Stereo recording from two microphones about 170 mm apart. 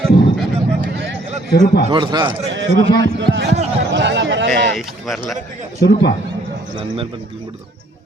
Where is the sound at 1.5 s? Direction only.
60° left (ahead or behind).